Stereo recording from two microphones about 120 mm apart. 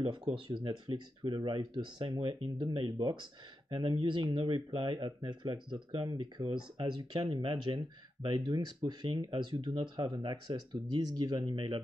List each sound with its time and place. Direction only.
0.0 s speech: 45° right (ahead or behind)